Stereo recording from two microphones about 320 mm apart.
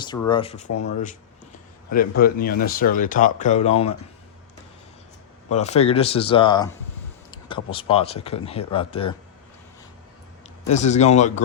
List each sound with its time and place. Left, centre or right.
0.0 s speech: centre
1.9 s speech: left
5.5 s speech: left
10.7 s speech: left